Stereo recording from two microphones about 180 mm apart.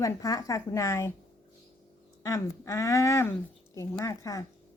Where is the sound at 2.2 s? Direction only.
15° left (ahead or behind).